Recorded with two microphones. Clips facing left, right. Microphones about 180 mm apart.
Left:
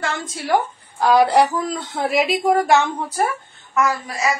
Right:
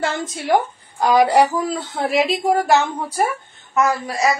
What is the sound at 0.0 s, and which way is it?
A woman's voice, 25° right (ahead or behind).